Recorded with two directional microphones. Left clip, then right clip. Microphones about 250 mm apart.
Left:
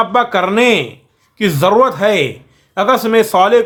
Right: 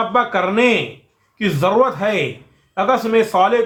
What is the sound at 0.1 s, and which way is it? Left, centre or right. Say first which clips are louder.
A man's voice: left 4 dB; left.